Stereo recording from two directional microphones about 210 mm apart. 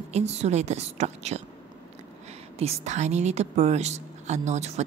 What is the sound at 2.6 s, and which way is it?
A woman's voice, 35° right (ahead or behind).